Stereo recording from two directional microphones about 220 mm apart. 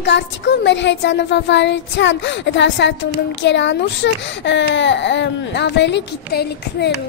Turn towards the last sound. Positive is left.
turn(degrees=45)  # may be behind; listen again after turning